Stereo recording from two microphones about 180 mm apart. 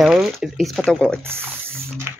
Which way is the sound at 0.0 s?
5° right (ahead or behind).